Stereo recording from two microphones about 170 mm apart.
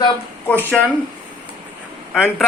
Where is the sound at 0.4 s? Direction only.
10° left (ahead or behind).